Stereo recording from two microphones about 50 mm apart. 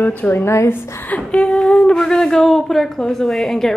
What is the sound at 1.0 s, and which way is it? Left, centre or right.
Speech, left.